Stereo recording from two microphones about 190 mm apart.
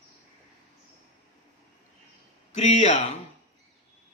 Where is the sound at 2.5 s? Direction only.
35° left (ahead or behind).